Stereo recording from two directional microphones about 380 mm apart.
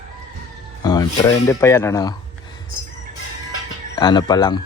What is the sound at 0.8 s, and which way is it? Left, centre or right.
Speech, centre.